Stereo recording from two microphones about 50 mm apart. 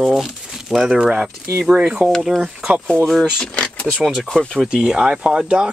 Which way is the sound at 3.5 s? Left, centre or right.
Left.